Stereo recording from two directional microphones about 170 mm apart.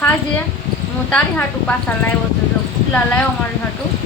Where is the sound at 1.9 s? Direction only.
10° left (ahead or behind).